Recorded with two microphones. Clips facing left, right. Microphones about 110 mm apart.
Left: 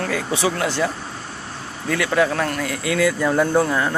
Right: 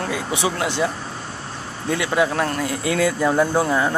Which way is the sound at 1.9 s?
20° right (ahead or behind).